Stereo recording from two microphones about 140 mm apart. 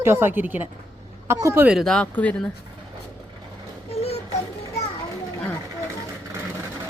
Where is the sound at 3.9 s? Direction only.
45° left (ahead or behind).